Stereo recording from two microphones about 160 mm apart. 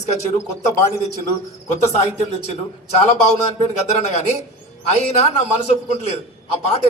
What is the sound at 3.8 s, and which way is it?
A man's voice, 45° left (ahead or behind).